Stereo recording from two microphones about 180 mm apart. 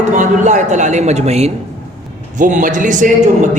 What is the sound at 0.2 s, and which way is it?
A man's voice, 45° right (ahead or behind).